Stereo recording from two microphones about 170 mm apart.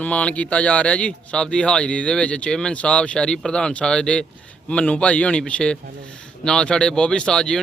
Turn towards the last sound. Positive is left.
turn(degrees=5)  # may be behind; listen again after turning